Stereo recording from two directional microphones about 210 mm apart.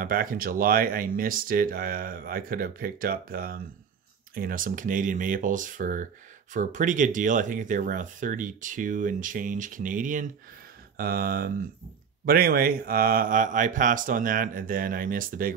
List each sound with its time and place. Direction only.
0.0 s speech: 40° right (ahead or behind)